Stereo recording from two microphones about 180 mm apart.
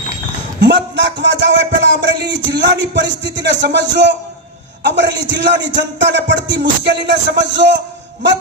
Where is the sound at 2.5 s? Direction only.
75° right (ahead or behind).